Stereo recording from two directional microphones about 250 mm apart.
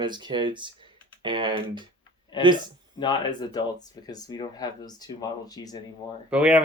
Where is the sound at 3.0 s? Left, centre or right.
Centre.